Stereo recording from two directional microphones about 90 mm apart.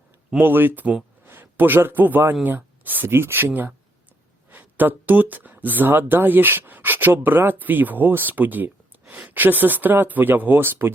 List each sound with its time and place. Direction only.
0.4 s a man's voice: 20° right (ahead or behind)